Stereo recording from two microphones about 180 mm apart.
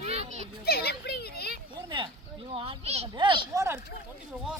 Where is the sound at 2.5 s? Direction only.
30° right (ahead or behind).